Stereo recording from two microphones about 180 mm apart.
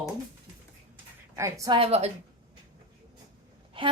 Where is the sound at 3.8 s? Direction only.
30° right (ahead or behind).